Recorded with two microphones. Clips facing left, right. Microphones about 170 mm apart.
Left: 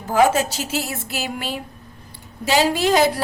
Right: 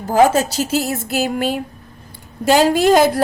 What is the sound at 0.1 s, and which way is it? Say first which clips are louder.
A woman's voice: right 3 dB; 40° right (ahead or behind).